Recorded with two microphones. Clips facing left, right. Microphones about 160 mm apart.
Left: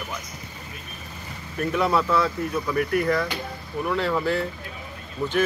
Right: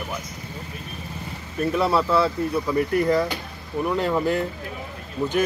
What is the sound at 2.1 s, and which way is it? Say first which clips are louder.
Speech: right 2 dB; 30° right (ahead or behind).